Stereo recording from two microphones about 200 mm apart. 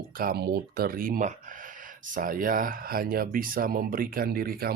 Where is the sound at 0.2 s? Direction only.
50° right (ahead or behind).